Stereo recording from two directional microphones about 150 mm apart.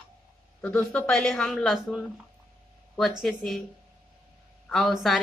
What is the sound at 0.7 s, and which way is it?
A woman's voice, 5° left (ahead or behind).